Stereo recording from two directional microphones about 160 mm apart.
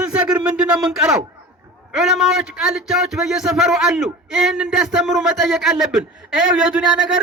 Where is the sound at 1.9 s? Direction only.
Centre (ahead or behind).